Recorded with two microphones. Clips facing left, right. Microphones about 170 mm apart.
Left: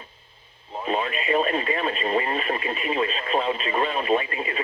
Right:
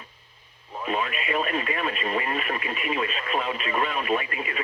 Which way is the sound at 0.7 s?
30° left (ahead or behind).